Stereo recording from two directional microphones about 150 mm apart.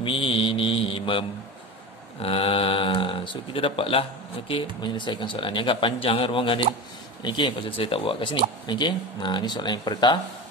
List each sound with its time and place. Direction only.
0.0 s mantra: 35° left (ahead or behind)
2.2 s speech: 40° left (ahead or behind)